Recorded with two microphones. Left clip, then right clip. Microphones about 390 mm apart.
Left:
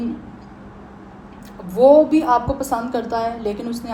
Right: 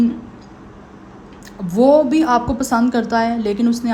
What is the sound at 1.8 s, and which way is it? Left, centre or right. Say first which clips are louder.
A woman's voice: left 1 dB; right.